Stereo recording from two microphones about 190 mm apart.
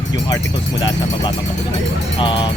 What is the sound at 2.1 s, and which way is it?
Speech, 25° left (ahead or behind).